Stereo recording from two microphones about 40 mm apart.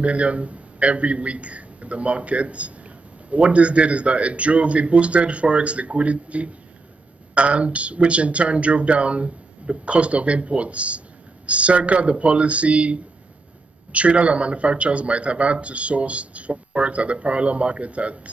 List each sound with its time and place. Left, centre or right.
0.0 s speech: right